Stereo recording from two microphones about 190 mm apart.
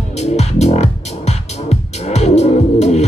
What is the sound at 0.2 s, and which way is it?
Music, 35° left (ahead or behind).